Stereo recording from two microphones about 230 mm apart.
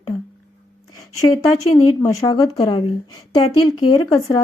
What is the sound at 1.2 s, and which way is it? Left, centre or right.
A woman's voice, centre.